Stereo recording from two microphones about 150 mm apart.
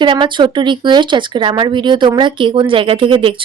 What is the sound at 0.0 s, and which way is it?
Speech, 30° right (ahead or behind).